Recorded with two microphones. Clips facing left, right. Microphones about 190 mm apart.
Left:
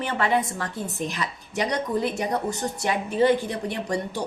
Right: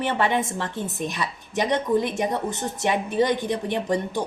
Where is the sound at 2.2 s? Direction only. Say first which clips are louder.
Right 1 dB; 20° right (ahead or behind).